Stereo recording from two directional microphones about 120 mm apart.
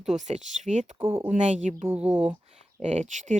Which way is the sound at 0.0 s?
70° right (ahead or behind).